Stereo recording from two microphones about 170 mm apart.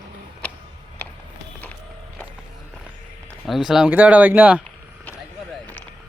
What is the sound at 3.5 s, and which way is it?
Speech, centre (ahead or behind).